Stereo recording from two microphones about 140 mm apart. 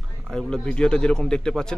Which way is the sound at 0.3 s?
5° left (ahead or behind).